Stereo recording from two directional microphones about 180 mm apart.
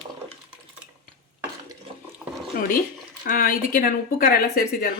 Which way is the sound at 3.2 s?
50° left (ahead or behind).